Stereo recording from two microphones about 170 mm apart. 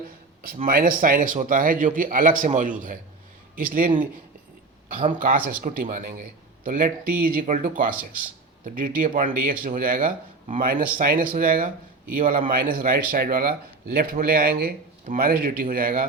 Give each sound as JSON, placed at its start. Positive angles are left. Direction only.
{"t": 0.4, "sound": "a man's voice", "side_deg": -55}